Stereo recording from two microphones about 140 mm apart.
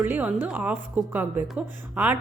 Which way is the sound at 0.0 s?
10° right (ahead or behind).